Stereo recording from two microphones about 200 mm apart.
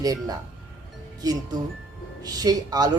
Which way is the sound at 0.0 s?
20° right (ahead or behind).